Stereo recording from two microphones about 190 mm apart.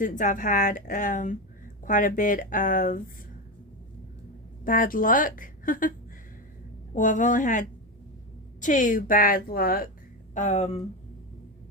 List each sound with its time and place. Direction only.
0.0 s speech: 45° left (ahead or behind)
4.6 s speech: 45° left (ahead or behind)
6.9 s speech: 40° left (ahead or behind)
10.3 s speech: 40° left (ahead or behind)